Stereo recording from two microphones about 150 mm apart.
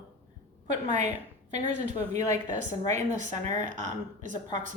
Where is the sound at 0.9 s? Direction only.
55° right (ahead or behind).